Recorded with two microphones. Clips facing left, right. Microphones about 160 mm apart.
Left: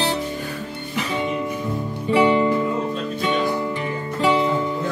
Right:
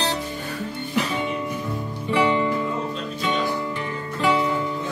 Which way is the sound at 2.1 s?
20° left (ahead or behind).